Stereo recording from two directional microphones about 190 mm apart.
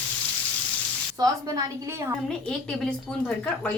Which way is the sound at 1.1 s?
20° right (ahead or behind).